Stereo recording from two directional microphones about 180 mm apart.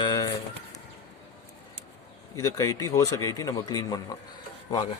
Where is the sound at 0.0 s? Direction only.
20° left (ahead or behind).